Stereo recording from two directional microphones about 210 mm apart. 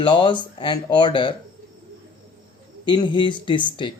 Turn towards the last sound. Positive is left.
turn(degrees=20)  # may be behind; listen again after turning